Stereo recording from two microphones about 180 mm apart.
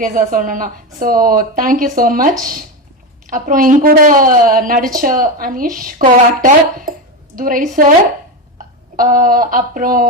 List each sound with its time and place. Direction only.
0.0 s a woman's voice: 50° right (ahead or behind)